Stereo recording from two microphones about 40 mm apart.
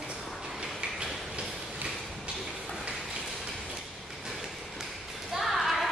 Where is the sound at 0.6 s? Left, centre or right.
Right.